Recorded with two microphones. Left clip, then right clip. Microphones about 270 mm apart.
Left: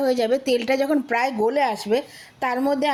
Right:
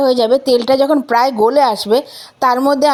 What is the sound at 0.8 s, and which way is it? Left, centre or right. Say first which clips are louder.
A woman's voice: right 9 dB; centre.